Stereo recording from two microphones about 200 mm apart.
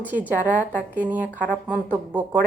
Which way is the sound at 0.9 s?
5° right (ahead or behind).